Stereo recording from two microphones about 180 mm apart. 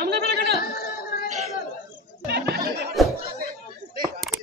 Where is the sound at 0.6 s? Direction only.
60° left (ahead or behind).